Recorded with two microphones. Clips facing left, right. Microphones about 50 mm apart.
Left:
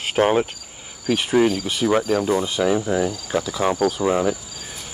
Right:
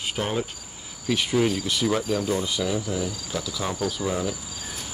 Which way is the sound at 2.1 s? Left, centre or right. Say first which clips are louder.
Left 5 dB; left.